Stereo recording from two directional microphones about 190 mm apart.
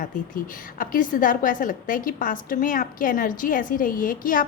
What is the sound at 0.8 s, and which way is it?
A woman's voice, 45° left (ahead or behind).